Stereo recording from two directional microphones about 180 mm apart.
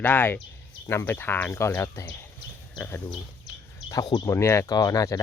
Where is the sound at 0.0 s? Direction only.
10° left (ahead or behind).